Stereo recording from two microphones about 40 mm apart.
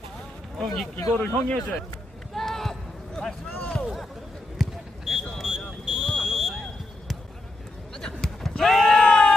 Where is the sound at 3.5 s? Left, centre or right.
Left.